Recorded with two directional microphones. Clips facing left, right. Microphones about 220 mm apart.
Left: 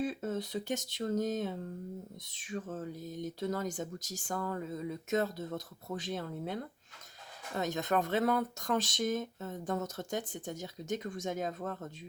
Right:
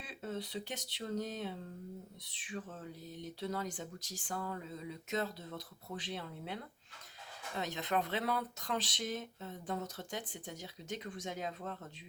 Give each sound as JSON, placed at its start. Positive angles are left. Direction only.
{"t": 0.0, "sound": "speech", "side_deg": 45}